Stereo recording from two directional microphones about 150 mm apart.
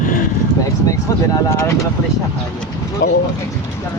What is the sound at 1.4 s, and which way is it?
Speech, 15° left (ahead or behind).